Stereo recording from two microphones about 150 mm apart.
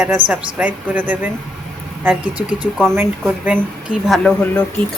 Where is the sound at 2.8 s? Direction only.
15° right (ahead or behind).